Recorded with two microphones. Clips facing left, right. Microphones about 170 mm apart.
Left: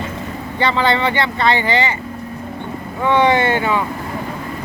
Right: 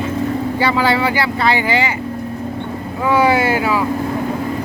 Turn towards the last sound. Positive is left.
turn(degrees=-5)  # may be behind; listen again after turning